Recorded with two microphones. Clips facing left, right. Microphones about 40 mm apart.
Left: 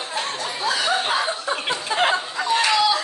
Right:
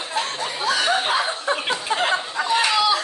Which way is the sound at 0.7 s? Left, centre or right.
Right.